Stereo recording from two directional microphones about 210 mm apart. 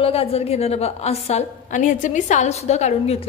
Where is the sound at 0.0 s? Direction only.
30° left (ahead or behind).